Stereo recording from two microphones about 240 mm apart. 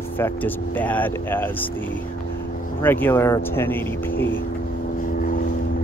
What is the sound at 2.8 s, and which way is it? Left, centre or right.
Speech, centre.